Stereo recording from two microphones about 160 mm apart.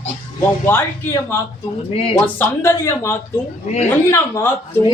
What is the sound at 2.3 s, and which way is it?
Speech, 15° left (ahead or behind).